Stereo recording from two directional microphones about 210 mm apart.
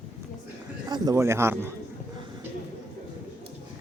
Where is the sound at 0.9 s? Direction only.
15° right (ahead or behind).